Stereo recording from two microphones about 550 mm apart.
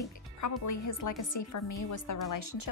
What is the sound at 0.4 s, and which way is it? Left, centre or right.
Speech, left.